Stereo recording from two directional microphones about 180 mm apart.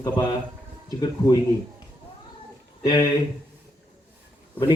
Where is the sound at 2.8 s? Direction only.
25° left (ahead or behind).